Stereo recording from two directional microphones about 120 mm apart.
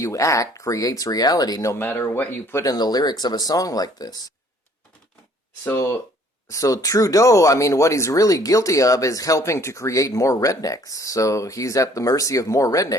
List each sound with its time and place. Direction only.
0.0 s speech: 25° left (ahead or behind)
5.6 s speech: 20° left (ahead or behind)